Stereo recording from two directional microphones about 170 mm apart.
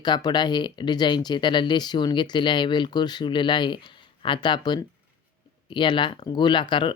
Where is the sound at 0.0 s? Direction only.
25° left (ahead or behind).